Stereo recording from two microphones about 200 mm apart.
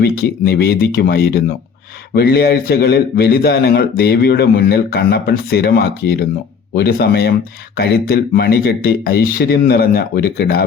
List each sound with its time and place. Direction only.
0.0 s speech: 50° left (ahead or behind)